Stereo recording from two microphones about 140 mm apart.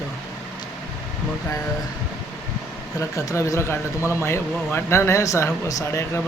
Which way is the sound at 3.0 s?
20° left (ahead or behind).